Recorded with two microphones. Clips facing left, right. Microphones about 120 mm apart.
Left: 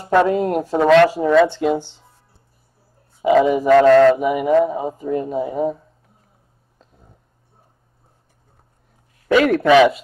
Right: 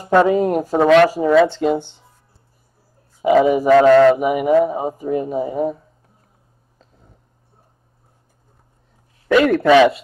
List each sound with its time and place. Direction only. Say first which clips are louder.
0.3 s speech: right 2 dB; 5° right (ahead or behind)
3.2 s speech: right 1 dB; centre (ahead or behind)
9.3 s speech: right 1 dB; centre (ahead or behind)